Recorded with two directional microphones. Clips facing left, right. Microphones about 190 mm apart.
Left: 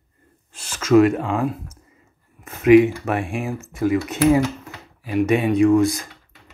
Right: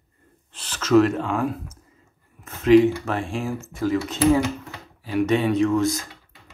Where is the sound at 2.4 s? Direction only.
15° left (ahead or behind).